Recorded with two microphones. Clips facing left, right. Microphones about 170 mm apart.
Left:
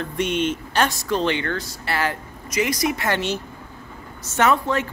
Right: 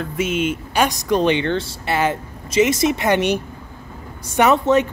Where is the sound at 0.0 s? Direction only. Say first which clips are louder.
Right 2 dB; 5° right (ahead or behind).